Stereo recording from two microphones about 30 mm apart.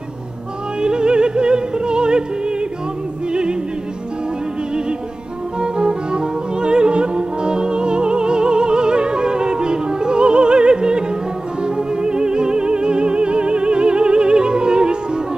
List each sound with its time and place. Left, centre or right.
0.7 s music: right
5.6 s music: right